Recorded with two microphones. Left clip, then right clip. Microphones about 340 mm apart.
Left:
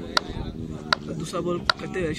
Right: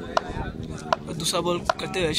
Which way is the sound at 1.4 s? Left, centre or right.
Centre.